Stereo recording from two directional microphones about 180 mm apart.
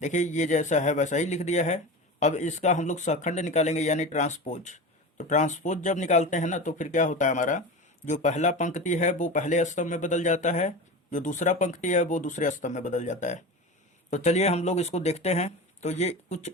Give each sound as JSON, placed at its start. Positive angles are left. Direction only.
{"t": 0.0, "sound": "speech", "side_deg": 40}